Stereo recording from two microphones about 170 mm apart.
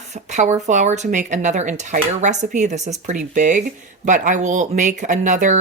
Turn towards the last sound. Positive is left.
turn(degrees=-50)  # may be behind; listen again after turning